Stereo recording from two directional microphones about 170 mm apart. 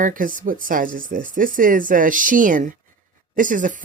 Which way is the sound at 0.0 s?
50° right (ahead or behind).